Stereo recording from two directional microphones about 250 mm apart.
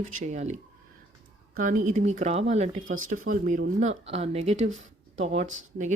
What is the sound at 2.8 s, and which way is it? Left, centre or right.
Speech, right.